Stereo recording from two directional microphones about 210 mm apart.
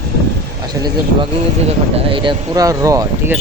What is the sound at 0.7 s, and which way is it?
Speech, 20° right (ahead or behind).